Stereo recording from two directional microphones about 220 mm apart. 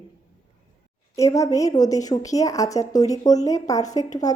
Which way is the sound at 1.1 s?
15° left (ahead or behind).